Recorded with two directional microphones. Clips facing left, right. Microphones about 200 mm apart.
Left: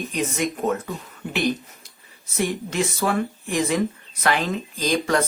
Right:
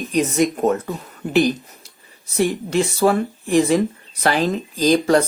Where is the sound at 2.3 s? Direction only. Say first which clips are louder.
Right 5 dB; 35° right (ahead or behind).